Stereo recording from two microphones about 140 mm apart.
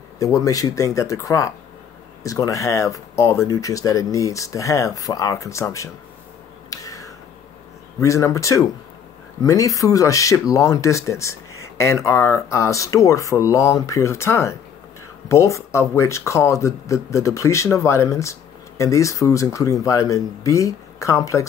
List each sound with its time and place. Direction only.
0.2 s speech: 25° left (ahead or behind)
6.7 s a sound: 25° left (ahead or behind)
8.0 s speech: 20° left (ahead or behind)